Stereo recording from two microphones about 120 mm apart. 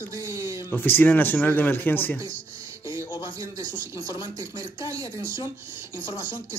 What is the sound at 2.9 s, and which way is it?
Speech, 40° left (ahead or behind).